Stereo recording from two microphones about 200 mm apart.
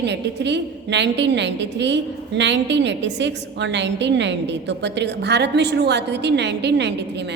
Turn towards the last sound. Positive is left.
turn(degrees=-60)  # may be behind; listen again after turning